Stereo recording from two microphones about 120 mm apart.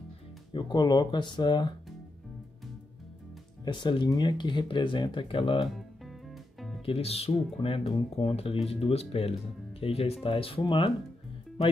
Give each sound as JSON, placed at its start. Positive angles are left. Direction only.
{"t": 0.5, "sound": "speech", "side_deg": 40}
{"t": 3.6, "sound": "speech", "side_deg": 40}
{"t": 6.9, "sound": "speech", "side_deg": 55}